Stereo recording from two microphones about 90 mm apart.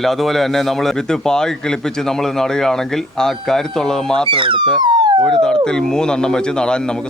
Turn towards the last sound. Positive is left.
turn(degrees=10)  # may be behind; listen again after turning